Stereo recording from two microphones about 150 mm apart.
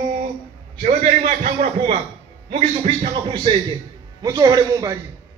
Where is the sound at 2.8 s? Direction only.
35° right (ahead or behind).